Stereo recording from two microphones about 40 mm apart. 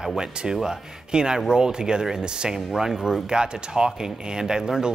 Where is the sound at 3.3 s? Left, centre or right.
Right.